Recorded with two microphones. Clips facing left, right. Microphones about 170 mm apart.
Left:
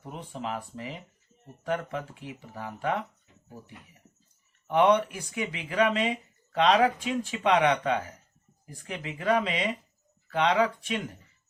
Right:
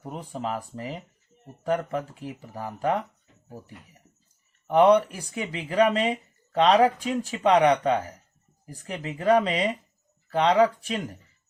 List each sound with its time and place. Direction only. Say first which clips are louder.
0.0 s speech: right 4 dB; 40° right (ahead or behind)
4.7 s speech: right 4 dB; 35° right (ahead or behind)